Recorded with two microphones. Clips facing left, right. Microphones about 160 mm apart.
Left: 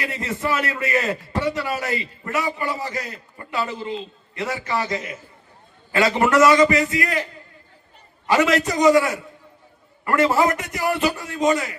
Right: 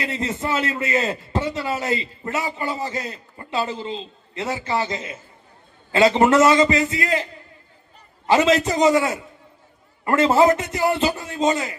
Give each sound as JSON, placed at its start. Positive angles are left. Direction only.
{"t": 0.0, "sound": "a man's voice", "side_deg": -20}
{"t": 8.3, "sound": "a man's voice", "side_deg": -20}